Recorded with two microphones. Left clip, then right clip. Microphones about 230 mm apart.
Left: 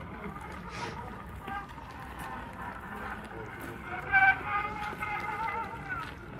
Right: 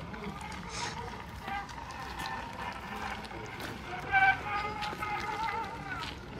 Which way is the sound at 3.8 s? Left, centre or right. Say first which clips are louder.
Left 2 dB; right.